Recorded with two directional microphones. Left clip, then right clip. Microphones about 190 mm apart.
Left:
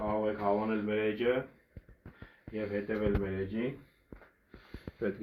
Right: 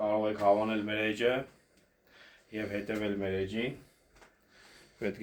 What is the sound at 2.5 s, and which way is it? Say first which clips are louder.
Speech: left 1 dB; 30° right (ahead or behind).